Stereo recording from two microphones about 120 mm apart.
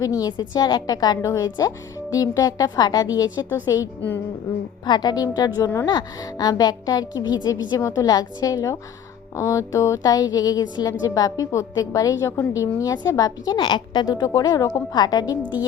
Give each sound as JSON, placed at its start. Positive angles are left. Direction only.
{"t": 0.0, "sound": "a woman's voice", "side_deg": 30}
{"t": 4.9, "sound": "a woman's voice", "side_deg": 35}